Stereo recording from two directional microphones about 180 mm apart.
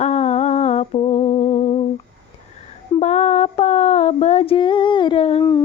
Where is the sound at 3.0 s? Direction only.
40° left (ahead or behind).